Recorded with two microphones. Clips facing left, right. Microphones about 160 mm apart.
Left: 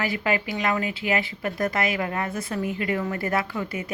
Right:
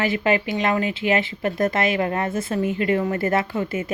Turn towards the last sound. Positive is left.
turn(degrees=-25)  # may be behind; listen again after turning